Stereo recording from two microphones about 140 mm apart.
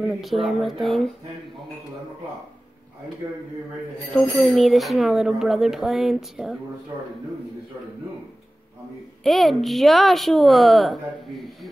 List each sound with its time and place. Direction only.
0.0 s speech: centre (ahead or behind)
4.1 s speech: centre (ahead or behind)
9.2 s speech: centre (ahead or behind)